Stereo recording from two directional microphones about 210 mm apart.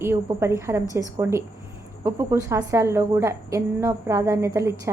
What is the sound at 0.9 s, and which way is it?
Speech, 15° left (ahead or behind).